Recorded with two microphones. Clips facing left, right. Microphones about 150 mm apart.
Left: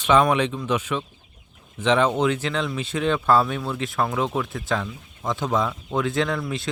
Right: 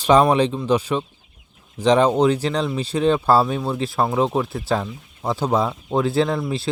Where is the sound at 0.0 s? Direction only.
35° right (ahead or behind).